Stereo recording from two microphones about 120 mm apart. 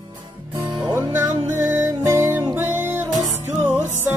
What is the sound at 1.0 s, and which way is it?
Music, 25° right (ahead or behind).